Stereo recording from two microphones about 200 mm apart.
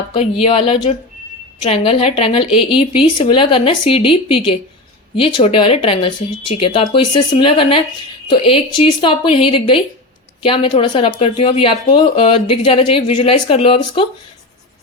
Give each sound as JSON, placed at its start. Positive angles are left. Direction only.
{"t": 0.1, "sound": "speech", "side_deg": 25}